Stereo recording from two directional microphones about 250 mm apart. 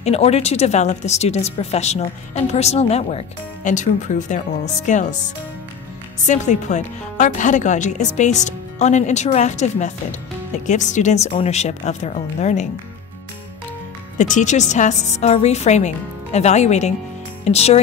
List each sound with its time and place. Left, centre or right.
0.0 s speech: left
6.2 s speech: left
14.1 s speech: left